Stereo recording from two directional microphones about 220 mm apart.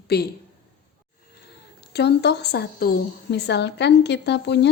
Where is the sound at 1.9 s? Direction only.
50° left (ahead or behind).